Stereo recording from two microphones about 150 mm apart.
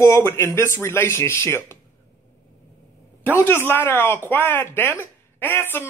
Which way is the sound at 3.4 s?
15° left (ahead or behind).